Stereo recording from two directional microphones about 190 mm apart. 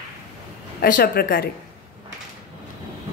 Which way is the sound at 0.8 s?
50° left (ahead or behind).